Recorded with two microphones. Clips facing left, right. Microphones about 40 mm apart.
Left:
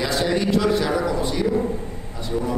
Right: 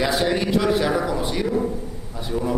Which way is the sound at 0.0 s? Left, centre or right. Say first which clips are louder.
Right 1 dB; centre.